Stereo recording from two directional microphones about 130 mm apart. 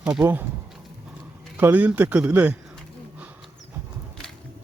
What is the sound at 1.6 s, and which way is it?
Speech, 10° right (ahead or behind).